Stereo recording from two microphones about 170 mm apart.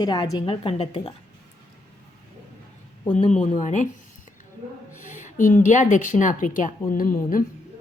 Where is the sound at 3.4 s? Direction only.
45° left (ahead or behind).